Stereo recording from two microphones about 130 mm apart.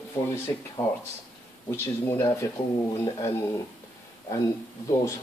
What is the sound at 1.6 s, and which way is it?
Speech, 20° left (ahead or behind).